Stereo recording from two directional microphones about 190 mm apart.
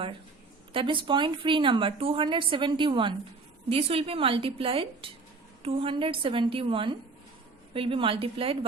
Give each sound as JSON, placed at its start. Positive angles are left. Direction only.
{"t": 0.7, "sound": "speech", "side_deg": -25}